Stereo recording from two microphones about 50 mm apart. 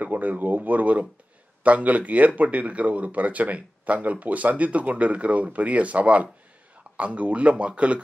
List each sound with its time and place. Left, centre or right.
0.0 s speech: right